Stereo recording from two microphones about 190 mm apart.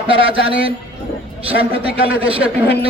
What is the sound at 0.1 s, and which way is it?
A man's voice, 30° right (ahead or behind).